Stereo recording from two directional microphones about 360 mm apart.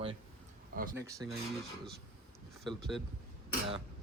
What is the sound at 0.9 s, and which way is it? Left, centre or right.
Speech, centre.